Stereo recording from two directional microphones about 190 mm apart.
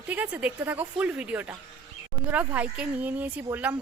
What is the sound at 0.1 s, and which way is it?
A woman's voice, 10° right (ahead or behind).